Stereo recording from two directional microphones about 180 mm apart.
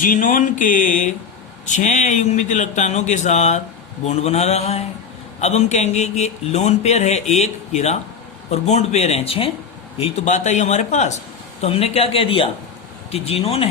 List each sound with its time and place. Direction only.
0.0 s speech: 45° left (ahead or behind); by 9.5 s 30° left (ahead or behind)
10.0 s speech: 40° left (ahead or behind)